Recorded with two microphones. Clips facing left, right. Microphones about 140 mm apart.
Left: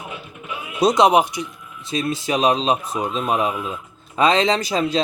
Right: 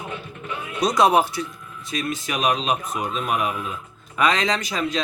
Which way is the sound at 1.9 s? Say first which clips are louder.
Left 5 dB; 30° left (ahead or behind).